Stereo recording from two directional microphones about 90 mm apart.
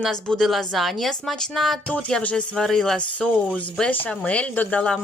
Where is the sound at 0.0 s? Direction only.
5° left (ahead or behind).